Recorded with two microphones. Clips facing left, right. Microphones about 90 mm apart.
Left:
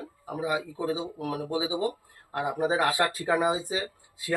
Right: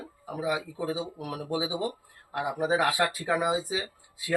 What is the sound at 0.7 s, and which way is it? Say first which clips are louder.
Speech: left 2 dB; 20° left (ahead or behind).